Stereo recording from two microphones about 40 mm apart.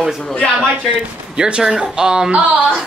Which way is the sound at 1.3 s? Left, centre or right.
Right.